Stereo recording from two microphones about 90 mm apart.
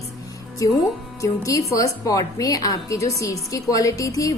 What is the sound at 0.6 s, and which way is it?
A woman's voice, 40° left (ahead or behind).